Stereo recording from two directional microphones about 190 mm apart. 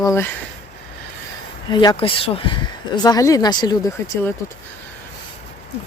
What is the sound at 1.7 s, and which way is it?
Speech, 25° left (ahead or behind).